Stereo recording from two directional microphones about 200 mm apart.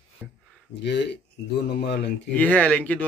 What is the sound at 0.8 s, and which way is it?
Speech, 60° left (ahead or behind).